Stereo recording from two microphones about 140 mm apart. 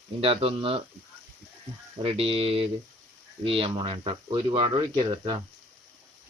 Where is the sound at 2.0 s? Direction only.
40° right (ahead or behind).